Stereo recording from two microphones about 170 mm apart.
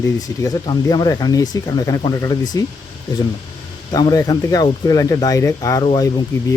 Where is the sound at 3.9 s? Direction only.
20° left (ahead or behind).